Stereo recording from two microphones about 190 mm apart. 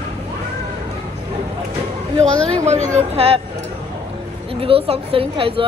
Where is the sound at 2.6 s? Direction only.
35° right (ahead or behind).